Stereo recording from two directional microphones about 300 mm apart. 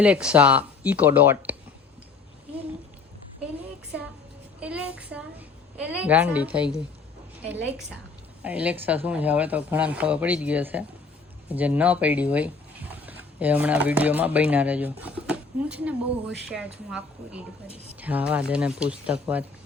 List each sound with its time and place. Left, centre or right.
0.0 s speech: centre
4.6 s child singing: centre
5.7 s speech: centre
18.0 s speech: centre